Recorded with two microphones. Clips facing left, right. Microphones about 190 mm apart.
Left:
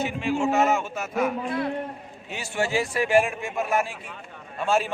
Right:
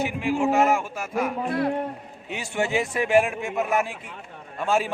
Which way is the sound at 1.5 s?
55° right (ahead or behind).